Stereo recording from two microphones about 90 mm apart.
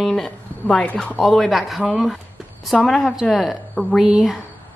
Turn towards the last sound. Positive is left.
turn(degrees=-5)  # may be behind; listen again after turning